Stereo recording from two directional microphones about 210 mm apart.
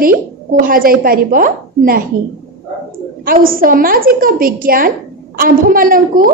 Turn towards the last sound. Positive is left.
turn(degrees=-40)  # may be behind; listen again after turning